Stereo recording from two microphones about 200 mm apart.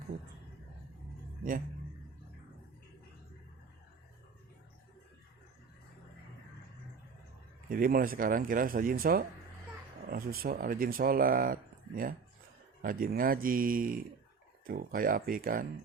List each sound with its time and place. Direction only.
7.7 s speech: 45° right (ahead or behind)